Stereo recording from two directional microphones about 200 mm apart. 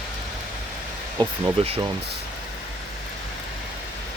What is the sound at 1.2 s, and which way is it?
Speech, 25° right (ahead or behind).